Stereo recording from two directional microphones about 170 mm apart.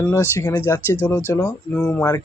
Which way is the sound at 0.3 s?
15° left (ahead or behind).